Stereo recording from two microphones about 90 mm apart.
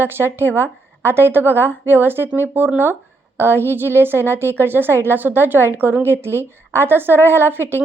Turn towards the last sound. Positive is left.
turn(degrees=-25)  # may be behind; listen again after turning